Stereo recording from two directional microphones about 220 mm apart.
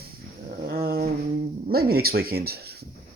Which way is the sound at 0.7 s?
45° right (ahead or behind).